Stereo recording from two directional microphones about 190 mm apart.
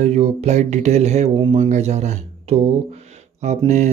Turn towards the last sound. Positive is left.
turn(degrees=-35)  # may be behind; listen again after turning